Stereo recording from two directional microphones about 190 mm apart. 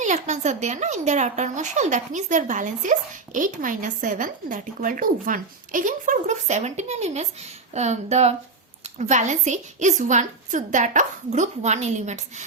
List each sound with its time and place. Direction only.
0.0 s a woman's voice: 40° right (ahead or behind)